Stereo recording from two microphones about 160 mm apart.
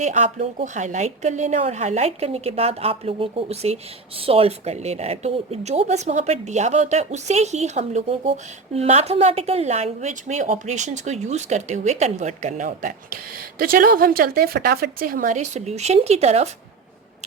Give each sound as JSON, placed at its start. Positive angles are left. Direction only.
{"t": 0.0, "sound": "a woman's voice", "side_deg": -50}
{"t": 13.6, "sound": "a woman's voice", "side_deg": -65}